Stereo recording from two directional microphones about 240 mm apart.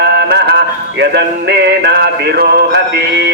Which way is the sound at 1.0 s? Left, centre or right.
Right.